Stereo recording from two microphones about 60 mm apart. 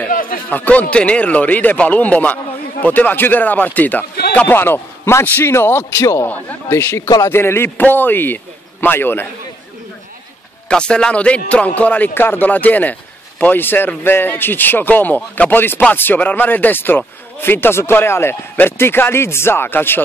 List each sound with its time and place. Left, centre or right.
0.0 s speech: left
4.6 s a man's voice: left
5.2 s a man's voice: left
10.7 s speech: centre
12.1 s speech: left